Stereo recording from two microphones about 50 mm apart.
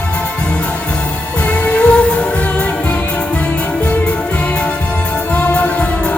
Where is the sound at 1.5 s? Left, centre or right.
Left.